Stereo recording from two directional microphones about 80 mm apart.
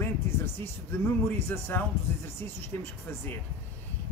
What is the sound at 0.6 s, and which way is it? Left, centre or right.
Speech, left.